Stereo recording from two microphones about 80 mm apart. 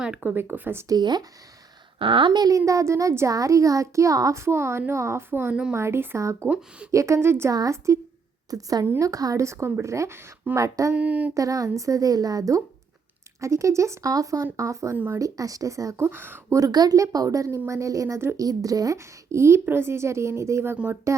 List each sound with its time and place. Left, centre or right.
0.0 s speech: centre
0.9 s speech: right
2.0 s speech: right
2.5 s a child's voice: right
7.5 s a child's voice: right
10.9 s speech: centre
11.3 s a child's voice: right
14.9 s speech: right
15.2 s a child's voice: right
16.0 s speech: right
16.5 s a child's voice: right
18.4 s a woman's voice: right
20.7 s speech: centre